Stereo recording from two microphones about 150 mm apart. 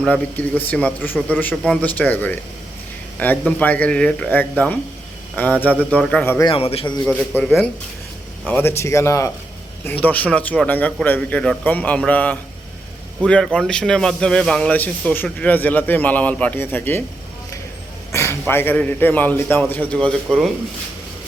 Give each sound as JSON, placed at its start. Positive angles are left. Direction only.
{"t": 0.0, "sound": "speech", "side_deg": 10}
{"t": 6.4, "sound": "a man's voice", "side_deg": 40}
{"t": 7.0, "sound": "speech", "side_deg": 10}
{"t": 8.4, "sound": "speech", "side_deg": 15}
{"t": 18.1, "sound": "speech", "side_deg": 15}